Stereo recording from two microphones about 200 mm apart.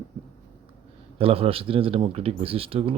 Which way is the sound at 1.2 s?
30° right (ahead or behind).